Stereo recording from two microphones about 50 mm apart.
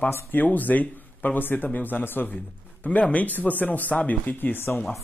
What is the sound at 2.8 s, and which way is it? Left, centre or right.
Speech, left.